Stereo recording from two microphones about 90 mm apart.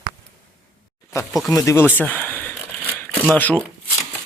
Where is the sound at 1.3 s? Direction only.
Centre (ahead or behind).